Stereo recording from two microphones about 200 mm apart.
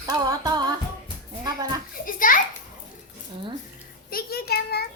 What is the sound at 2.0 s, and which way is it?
Children playing, 45° left (ahead or behind).